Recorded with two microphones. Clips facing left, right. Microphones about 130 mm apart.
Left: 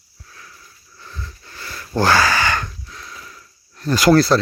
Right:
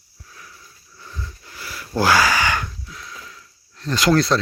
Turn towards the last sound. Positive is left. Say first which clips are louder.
# left 4 dB
turn(degrees=5)  # may be behind; listen again after turning